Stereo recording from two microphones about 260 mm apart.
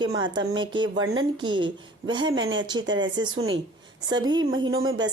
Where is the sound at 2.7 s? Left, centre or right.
Centre.